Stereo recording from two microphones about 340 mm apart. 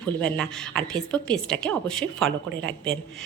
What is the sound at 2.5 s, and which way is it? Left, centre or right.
Speech, right.